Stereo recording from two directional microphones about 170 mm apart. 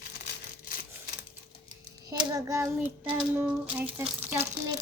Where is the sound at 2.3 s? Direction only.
20° right (ahead or behind).